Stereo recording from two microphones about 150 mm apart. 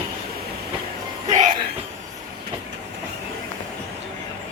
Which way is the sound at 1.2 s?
55° right (ahead or behind).